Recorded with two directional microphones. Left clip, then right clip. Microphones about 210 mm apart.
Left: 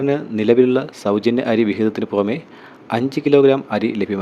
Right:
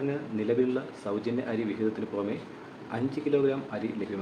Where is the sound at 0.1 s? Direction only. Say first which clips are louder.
Left 13 dB; 45° left (ahead or behind).